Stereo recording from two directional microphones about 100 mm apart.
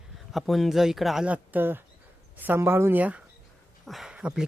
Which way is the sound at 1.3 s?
20° right (ahead or behind).